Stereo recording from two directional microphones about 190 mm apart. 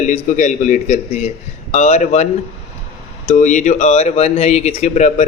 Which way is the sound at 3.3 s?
40° left (ahead or behind).